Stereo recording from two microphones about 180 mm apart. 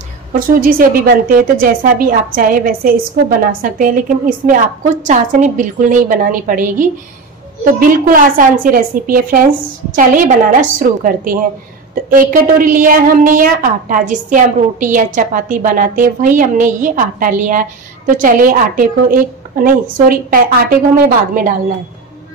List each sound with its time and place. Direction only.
0.3 s a woman's voice: 50° right (ahead or behind)
8.1 s a woman's voice: 50° right (ahead or behind)